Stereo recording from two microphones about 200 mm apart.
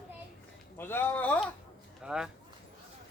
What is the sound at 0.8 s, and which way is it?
Speech, 10° left (ahead or behind).